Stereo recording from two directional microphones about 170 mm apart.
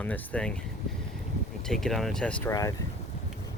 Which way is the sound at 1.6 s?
5° left (ahead or behind).